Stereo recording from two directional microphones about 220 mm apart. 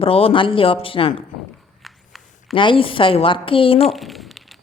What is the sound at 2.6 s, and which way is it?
Speech, 25° left (ahead or behind).